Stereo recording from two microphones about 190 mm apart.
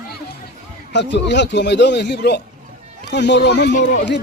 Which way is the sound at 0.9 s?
65° left (ahead or behind).